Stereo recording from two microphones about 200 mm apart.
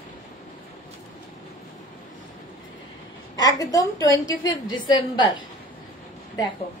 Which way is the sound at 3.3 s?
20° left (ahead or behind).